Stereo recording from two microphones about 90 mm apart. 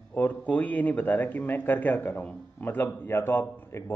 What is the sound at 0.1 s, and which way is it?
A man's voice, 20° left (ahead or behind).